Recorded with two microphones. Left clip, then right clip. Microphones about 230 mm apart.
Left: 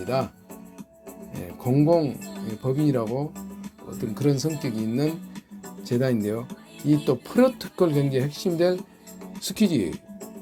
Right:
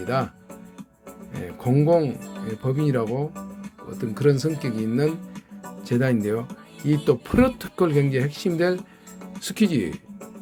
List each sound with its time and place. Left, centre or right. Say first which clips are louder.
0.0 s speech: right 1 dB; centre
1.4 s speech: even; centre